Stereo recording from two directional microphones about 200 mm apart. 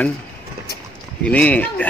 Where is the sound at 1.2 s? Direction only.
5° left (ahead or behind).